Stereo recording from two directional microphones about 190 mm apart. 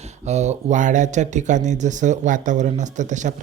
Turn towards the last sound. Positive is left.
turn(degrees=-40)  # may be behind; listen again after turning